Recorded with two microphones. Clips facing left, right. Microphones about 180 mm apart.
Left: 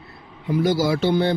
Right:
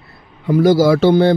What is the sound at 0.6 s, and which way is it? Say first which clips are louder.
Speech: right 8 dB; 90° right.